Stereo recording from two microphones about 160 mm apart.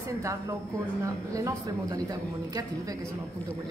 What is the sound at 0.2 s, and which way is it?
Speech, 20° right (ahead or behind).